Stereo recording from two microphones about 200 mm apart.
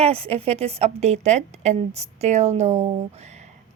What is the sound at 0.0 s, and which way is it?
A woman's voice, 30° right (ahead or behind).